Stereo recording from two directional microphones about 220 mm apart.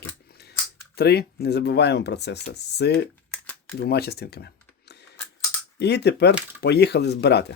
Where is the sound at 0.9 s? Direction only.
45° left (ahead or behind).